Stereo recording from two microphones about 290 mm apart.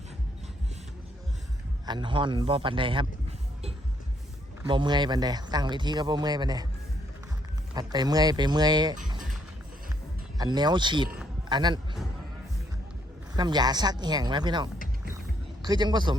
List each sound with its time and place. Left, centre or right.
1.9 s speech: centre
4.7 s speech: centre
7.7 s speech: centre
10.3 s a man's voice: centre
13.3 s speech: centre